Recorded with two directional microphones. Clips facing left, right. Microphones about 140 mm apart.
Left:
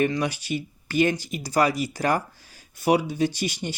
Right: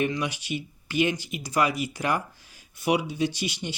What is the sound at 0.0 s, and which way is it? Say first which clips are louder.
Speech: left 4 dB; 40° left (ahead or behind).